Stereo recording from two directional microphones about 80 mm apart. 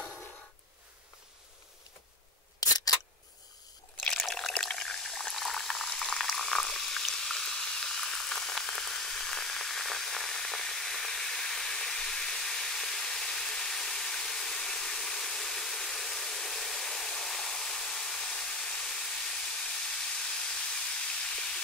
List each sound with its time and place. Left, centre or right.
2.6 s camera: left
4.0 s pour: centre